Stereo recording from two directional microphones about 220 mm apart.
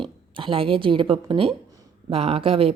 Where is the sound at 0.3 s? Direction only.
25° right (ahead or behind).